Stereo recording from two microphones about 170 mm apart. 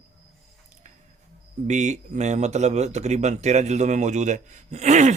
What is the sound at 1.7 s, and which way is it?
Speech, 45° right (ahead or behind).